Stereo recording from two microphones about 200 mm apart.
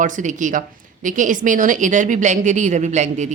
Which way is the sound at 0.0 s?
40° right (ahead or behind).